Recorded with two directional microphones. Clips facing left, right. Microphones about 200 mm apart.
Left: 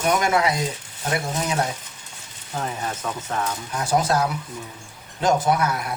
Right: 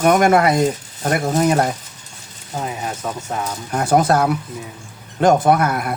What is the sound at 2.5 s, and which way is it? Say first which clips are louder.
Speech: right 3 dB; 10° right (ahead or behind).